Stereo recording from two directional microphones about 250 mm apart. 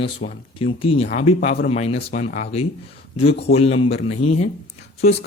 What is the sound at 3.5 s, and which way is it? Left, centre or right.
Speech, left.